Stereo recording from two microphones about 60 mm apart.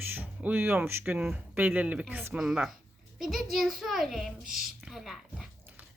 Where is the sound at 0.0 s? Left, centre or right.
Right.